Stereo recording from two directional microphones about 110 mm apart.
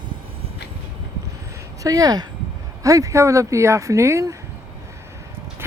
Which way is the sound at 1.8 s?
35° right (ahead or behind).